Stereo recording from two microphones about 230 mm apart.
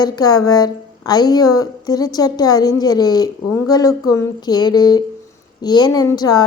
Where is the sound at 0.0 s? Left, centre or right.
Centre.